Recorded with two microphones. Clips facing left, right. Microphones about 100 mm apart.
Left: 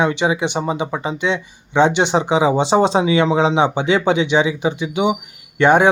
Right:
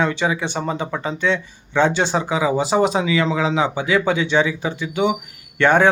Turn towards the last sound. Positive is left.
turn(degrees=15)  # may be behind; listen again after turning